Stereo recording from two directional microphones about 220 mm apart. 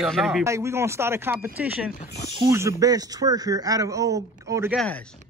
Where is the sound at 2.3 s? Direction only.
15° right (ahead or behind).